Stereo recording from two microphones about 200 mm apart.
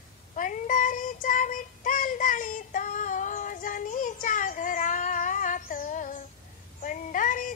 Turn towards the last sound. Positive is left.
turn(degrees=40)  # may be behind; listen again after turning